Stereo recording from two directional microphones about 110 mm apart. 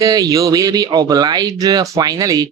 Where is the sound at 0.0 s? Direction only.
35° right (ahead or behind).